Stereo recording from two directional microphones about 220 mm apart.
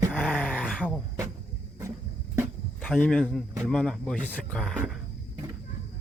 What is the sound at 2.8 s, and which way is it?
A man's voice, 5° left (ahead or behind).